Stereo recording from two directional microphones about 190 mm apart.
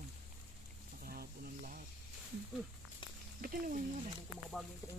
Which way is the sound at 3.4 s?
45° right (ahead or behind).